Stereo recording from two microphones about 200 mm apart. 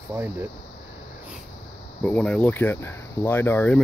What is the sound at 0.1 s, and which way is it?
Speech, 10° right (ahead or behind).